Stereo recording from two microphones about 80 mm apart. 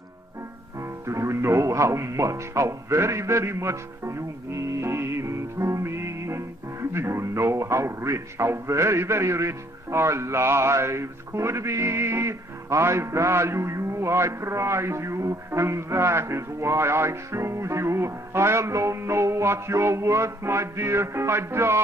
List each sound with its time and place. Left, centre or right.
0.7 s speech: right